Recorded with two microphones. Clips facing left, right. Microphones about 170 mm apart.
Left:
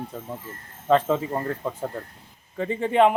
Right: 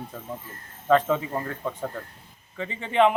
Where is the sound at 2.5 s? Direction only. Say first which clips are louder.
Left 3 dB; 40° left (ahead or behind).